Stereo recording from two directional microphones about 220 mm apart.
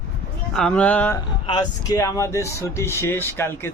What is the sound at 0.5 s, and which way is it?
Speech, 5° left (ahead or behind).